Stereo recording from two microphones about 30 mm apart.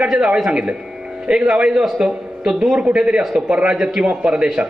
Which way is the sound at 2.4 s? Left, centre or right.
Centre.